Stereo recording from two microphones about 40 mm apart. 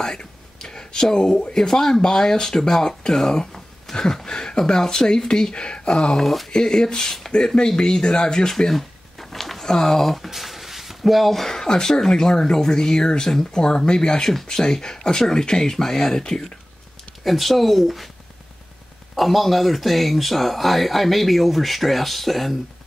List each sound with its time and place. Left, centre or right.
0.0 s a sound: centre
1.1 s speech: centre
6.1 s speech: centre
6.5 s speech: centre
8.5 s a sound: centre
9.7 s speech: centre
17.2 s speech: centre
19.1 s speech: centre